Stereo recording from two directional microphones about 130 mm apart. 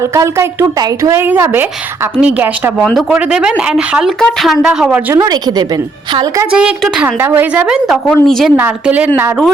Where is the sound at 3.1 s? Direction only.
10° right (ahead or behind).